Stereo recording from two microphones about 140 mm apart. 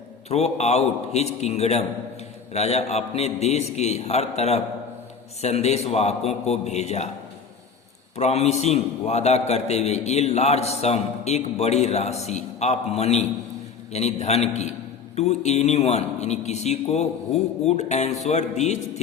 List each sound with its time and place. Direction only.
0.3 s a man's voice: 50° left (ahead or behind)
8.1 s a man's voice: 50° left (ahead or behind)